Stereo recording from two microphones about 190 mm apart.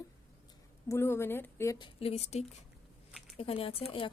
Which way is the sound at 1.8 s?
25° left (ahead or behind).